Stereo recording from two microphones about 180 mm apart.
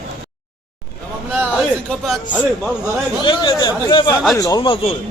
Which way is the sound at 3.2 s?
25° left (ahead or behind).